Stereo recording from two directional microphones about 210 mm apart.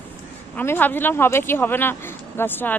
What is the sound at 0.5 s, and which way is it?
Speech, 10° left (ahead or behind).